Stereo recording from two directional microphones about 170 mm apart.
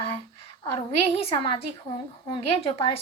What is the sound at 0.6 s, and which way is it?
A woman's voice, 30° left (ahead or behind).